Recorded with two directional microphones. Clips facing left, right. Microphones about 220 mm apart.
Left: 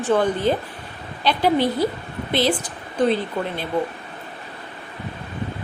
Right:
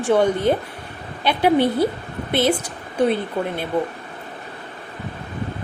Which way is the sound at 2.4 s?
10° right (ahead or behind).